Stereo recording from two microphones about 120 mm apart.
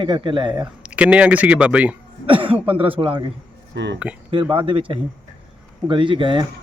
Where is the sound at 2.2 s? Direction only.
45° right (ahead or behind).